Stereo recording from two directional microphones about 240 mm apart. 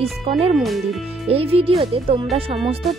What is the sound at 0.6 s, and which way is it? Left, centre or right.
Speech, centre.